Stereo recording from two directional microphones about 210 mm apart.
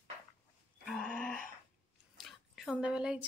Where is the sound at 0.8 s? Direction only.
5° left (ahead or behind).